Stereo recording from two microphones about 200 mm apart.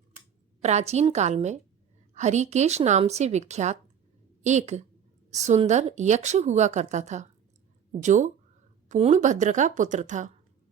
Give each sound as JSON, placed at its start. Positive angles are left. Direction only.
{"t": 0.6, "sound": "a woman's voice", "side_deg": -35}